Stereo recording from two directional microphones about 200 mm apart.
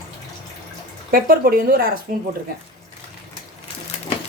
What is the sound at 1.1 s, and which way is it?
Speech, 50° right (ahead or behind).